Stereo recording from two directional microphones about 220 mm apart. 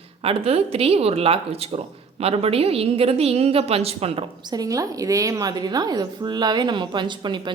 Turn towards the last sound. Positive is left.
turn(degrees=-20)  # may be behind; listen again after turning